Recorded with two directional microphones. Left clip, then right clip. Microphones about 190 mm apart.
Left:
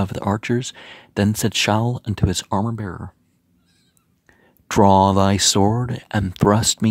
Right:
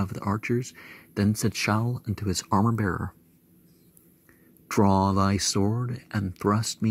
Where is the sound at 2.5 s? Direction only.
15° left (ahead or behind).